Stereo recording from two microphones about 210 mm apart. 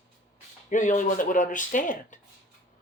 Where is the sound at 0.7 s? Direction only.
35° left (ahead or behind).